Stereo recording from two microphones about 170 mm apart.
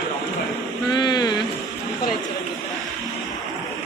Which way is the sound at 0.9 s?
25° left (ahead or behind).